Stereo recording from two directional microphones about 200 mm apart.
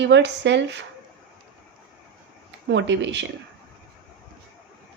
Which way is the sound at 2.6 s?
60° right (ahead or behind).